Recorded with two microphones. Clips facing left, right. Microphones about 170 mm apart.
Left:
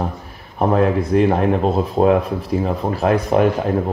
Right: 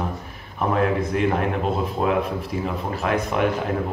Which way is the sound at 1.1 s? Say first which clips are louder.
Left 7 dB; 35° left (ahead or behind).